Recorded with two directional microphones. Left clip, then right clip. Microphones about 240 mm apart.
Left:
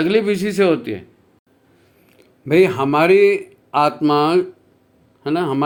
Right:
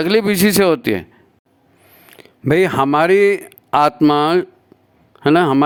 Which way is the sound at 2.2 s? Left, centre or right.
Right.